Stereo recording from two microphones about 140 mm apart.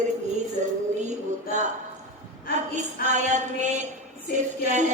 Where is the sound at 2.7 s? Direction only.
60° right (ahead or behind).